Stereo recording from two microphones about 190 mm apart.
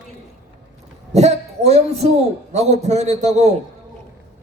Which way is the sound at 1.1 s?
35° right (ahead or behind).